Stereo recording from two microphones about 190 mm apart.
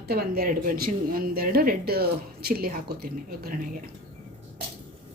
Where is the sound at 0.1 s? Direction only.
55° right (ahead or behind).